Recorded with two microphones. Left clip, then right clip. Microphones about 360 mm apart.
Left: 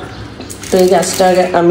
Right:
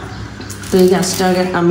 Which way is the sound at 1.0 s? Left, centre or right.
Centre.